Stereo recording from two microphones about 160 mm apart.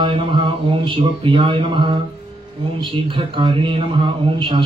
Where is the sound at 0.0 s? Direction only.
30° right (ahead or behind).